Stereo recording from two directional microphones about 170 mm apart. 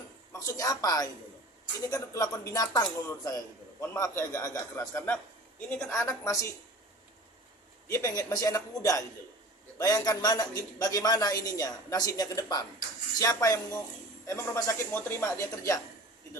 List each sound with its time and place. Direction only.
0.3 s a woman's voice: 20° left (ahead or behind)
7.9 s speech: 15° left (ahead or behind)